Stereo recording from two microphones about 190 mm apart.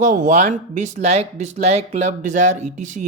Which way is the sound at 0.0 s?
40° right (ahead or behind).